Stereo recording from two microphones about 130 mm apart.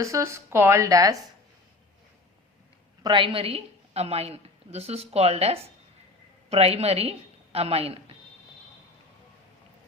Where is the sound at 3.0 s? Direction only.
40° right (ahead or behind).